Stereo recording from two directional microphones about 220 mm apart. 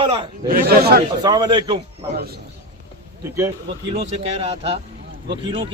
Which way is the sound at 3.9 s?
25° right (ahead or behind).